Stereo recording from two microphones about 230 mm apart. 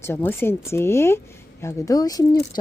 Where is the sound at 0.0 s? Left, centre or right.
Centre.